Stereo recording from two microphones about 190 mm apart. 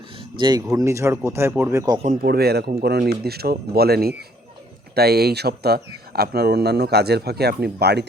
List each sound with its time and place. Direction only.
0.2 s speech: 25° right (ahead or behind)
2.2 s speech: 55° right (ahead or behind)